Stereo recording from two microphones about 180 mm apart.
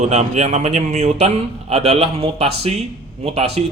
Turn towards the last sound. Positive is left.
turn(degrees=-35)  # may be behind; listen again after turning